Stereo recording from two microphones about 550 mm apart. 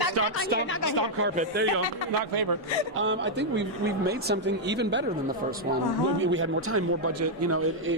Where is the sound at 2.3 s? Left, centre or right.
Right.